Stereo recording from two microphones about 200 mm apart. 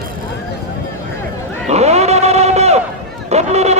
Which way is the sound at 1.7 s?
35° right (ahead or behind).